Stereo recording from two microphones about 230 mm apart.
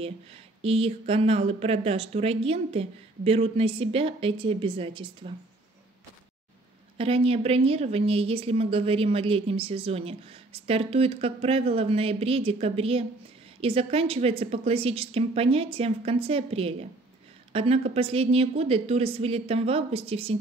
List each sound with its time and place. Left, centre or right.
0.6 s a woman's voice: right
7.0 s a woman's voice: right